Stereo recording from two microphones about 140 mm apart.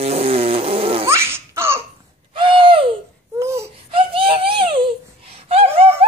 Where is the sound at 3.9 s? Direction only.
40° right (ahead or behind).